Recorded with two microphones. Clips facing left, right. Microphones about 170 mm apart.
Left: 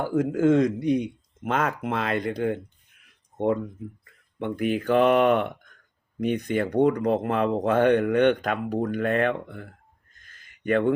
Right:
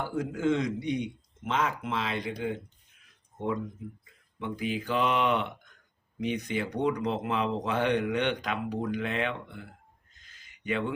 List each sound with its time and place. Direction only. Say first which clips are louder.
0.0 s speech: left 7 dB; 50° left (ahead or behind)
0.9 s a man's voice: left 7 dB; centre (ahead or behind)
1.5 s speech: left 4 dB; 55° left (ahead or behind)
10.2 s a sound: left 3 dB; 55° left (ahead or behind)